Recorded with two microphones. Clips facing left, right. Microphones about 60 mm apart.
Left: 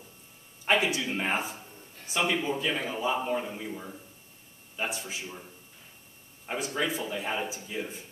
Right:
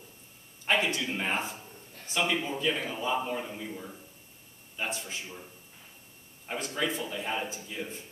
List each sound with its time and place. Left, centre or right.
0.7 s a man's voice: centre
6.4 s a man's voice: centre